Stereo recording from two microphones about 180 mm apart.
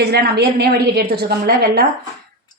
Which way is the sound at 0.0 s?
65° right (ahead or behind).